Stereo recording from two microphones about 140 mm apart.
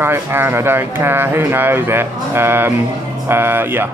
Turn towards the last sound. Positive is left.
turn(degrees=-15)  # may be behind; listen again after turning